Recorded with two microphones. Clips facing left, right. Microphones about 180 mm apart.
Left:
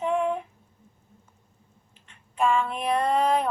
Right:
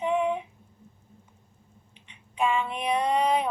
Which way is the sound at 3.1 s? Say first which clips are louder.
Left 1 dB; 45° left (ahead or behind).